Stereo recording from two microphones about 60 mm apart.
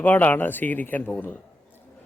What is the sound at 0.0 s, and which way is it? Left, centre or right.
A man's voice, left.